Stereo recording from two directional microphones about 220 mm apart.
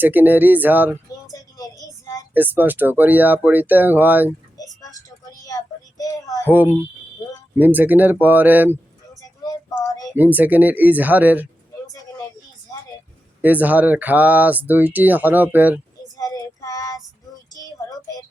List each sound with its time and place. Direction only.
0.0 s speech: 10° right (ahead or behind)
1.3 s a sound: 15° left (ahead or behind)
2.3 s speech: 10° right (ahead or behind)
4.5 s child singing: 15° left (ahead or behind)
6.5 s speech: 10° right (ahead or behind)
9.4 s a sound: 15° left (ahead or behind)
10.2 s speech: 5° right (ahead or behind)
13.4 s speech: 5° right (ahead or behind)
16.1 s child singing: 15° left (ahead or behind)